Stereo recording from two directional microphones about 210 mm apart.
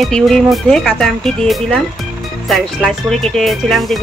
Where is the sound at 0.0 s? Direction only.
Centre (ahead or behind).